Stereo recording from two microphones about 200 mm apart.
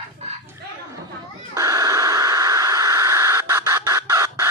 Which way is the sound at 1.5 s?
15° right (ahead or behind).